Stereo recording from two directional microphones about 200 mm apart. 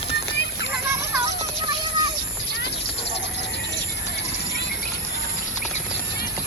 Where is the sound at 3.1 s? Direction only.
60° left (ahead or behind).